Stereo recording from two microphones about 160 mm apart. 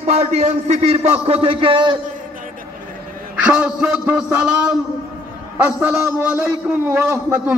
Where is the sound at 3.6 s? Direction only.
10° right (ahead or behind).